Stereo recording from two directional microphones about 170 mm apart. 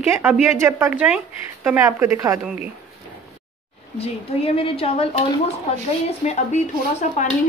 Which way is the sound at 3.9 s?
35° left (ahead or behind).